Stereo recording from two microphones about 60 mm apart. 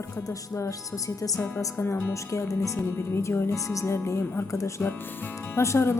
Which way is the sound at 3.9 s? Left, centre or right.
Left.